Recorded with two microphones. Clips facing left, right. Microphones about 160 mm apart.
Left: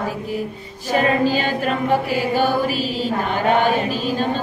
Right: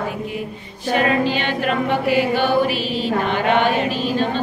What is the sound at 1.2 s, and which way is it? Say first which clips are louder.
Chant: left 1 dB; 40° left (ahead or behind).